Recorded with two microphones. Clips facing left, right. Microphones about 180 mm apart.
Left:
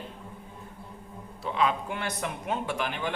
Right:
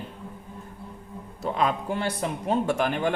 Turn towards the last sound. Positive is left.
turn(degrees=-45)  # may be behind; listen again after turning